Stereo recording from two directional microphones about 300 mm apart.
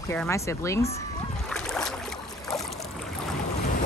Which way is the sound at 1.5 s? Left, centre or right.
Centre.